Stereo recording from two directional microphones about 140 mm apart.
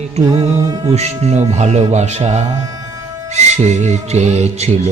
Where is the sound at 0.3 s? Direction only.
25° right (ahead or behind).